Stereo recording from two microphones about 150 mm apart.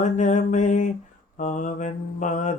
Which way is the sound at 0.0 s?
55° left (ahead or behind).